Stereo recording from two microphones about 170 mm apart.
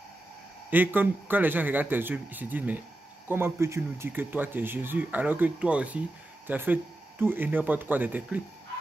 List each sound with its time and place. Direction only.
0.7 s speech: 10° right (ahead or behind)